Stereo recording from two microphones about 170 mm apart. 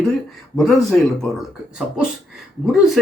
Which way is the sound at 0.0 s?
Centre (ahead or behind).